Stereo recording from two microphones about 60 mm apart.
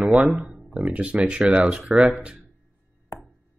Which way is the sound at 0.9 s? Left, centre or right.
Right.